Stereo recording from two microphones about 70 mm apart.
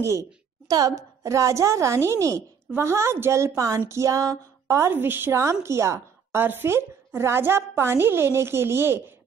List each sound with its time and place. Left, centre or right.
0.7 s a woman's voice: right
4.9 s a woman's voice: right
5.4 s a woman's voice: right